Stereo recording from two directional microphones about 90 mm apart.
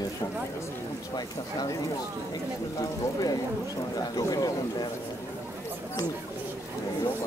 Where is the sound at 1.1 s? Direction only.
50° left (ahead or behind).